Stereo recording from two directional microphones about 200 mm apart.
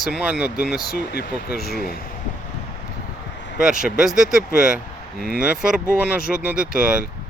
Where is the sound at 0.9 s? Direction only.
50° left (ahead or behind).